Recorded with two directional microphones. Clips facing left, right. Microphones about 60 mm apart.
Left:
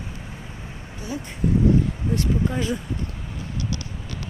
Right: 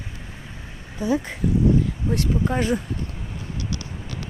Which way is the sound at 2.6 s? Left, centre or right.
Right.